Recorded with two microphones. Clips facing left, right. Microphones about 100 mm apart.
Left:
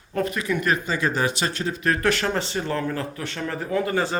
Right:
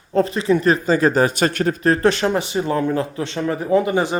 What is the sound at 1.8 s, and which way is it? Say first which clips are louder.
Speech: right 5 dB; 30° right (ahead or behind).